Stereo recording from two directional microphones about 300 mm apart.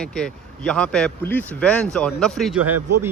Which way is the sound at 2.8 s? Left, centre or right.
Right.